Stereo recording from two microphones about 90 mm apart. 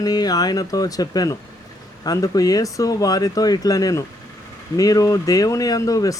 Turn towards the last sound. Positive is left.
turn(degrees=40)  # may be behind; listen again after turning